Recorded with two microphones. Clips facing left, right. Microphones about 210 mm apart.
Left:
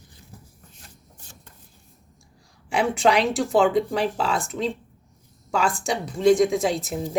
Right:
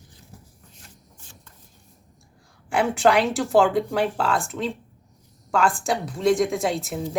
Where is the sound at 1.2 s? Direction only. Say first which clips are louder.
Left 1 dB; 40° left (ahead or behind).